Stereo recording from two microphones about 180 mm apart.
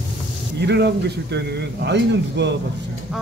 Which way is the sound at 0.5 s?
70° right (ahead or behind).